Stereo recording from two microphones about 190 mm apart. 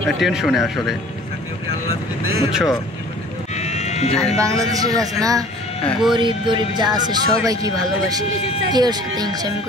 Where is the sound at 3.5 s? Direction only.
35° left (ahead or behind).